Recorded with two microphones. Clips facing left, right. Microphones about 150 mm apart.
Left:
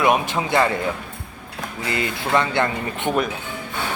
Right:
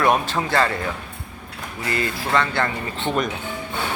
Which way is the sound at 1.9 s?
20° left (ahead or behind).